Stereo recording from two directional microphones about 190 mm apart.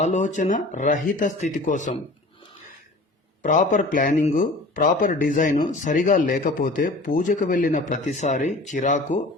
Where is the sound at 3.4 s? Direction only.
40° left (ahead or behind).